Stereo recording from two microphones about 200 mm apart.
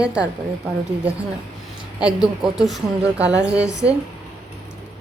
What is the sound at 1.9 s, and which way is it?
A woman's voice, 5° right (ahead or behind).